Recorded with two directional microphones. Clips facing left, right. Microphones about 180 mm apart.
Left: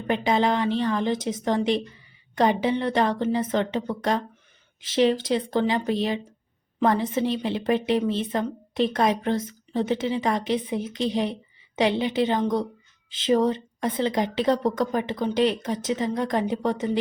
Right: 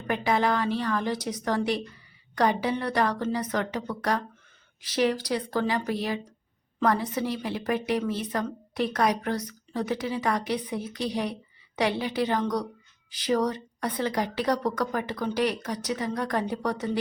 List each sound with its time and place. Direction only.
0.1 s a woman's voice: 20° left (ahead or behind)